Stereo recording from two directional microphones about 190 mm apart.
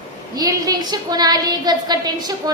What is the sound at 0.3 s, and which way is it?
A woman's voice, 20° right (ahead or behind).